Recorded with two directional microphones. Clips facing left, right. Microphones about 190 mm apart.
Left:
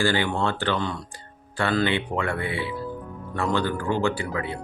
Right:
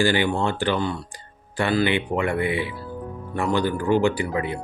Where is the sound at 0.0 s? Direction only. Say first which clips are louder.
Right 2 dB; 15° right (ahead or behind).